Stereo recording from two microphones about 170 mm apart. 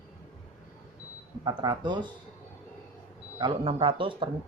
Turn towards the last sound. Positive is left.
turn(degrees=-30)  # may be behind; listen again after turning